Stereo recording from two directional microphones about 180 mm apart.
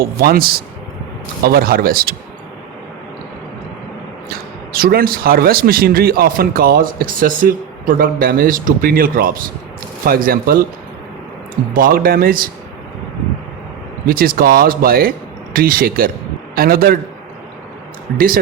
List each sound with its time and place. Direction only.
0.0 s a man's voice: 55° right (ahead or behind)
4.3 s a man's voice: 55° right (ahead or behind)
11.7 s speech: 55° right (ahead or behind)
14.1 s a man's voice: 55° right (ahead or behind)